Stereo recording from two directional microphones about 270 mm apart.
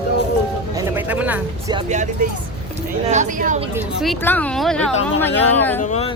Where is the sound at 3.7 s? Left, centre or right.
Centre.